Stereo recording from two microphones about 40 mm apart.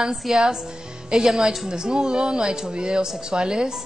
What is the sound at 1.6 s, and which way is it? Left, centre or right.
A woman's voice, centre.